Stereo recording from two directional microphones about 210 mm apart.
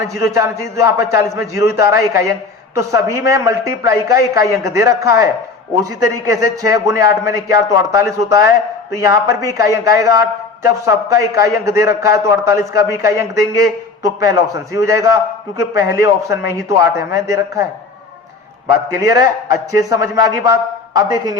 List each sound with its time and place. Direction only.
0.3 s a man's voice: 15° right (ahead or behind)
18.9 s a man's voice: 15° right (ahead or behind)